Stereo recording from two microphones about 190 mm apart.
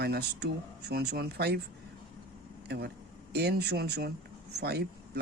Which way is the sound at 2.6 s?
60° right (ahead or behind).